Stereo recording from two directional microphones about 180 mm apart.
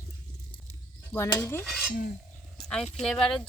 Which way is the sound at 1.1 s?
15° left (ahead or behind).